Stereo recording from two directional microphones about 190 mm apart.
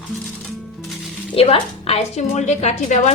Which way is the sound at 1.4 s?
30° left (ahead or behind).